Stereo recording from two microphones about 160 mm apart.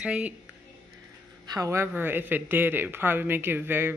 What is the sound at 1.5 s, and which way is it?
Speech, 20° right (ahead or behind).